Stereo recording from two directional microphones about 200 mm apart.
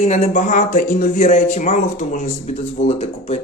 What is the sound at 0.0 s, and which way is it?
Speech, 35° left (ahead or behind).